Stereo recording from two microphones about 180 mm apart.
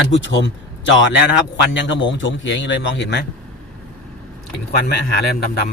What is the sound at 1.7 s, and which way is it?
A man's voice, 90° left.